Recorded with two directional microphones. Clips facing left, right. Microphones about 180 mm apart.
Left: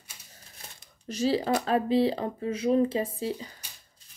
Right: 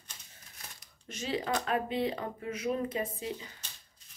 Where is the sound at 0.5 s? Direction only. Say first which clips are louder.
Left 2 dB; 30° left (ahead or behind).